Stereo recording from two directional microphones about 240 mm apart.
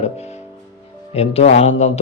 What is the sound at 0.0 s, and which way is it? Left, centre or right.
Music, left.